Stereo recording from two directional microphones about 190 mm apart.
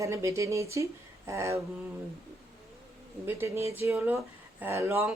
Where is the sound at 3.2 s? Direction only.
15° right (ahead or behind).